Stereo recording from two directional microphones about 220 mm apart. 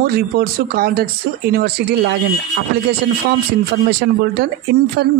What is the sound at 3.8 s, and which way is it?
Speech, 50° right (ahead or behind).